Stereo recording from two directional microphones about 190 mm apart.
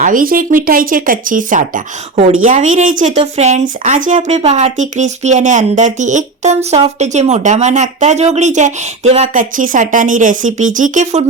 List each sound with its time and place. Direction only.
0.0 s speech: 45° right (ahead or behind)